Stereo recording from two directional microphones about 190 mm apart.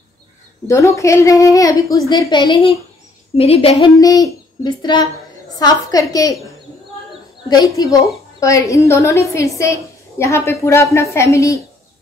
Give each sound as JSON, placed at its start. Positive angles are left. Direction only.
{"t": 0.7, "sound": "a woman's voice", "side_deg": 15}
{"t": 4.0, "sound": "a woman's voice", "side_deg": 20}
{"t": 7.4, "sound": "a woman's voice", "side_deg": 20}